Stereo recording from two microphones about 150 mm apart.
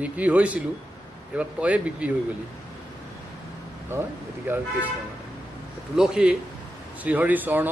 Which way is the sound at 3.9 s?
15° right (ahead or behind).